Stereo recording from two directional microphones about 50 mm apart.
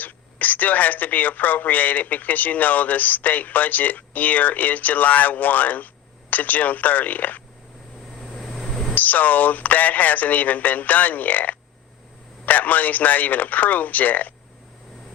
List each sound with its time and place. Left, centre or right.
0.0 s speech: left
8.4 s a sound: centre
9.0 s speech: left